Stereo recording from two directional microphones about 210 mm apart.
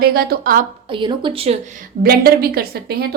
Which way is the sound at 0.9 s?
25° right (ahead or behind).